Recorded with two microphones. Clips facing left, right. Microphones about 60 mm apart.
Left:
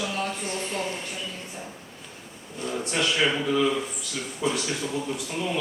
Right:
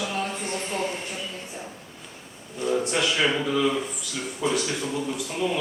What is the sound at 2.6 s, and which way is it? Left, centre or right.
Speech, centre.